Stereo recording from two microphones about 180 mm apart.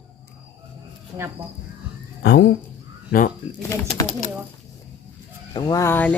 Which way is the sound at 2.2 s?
70° left (ahead or behind).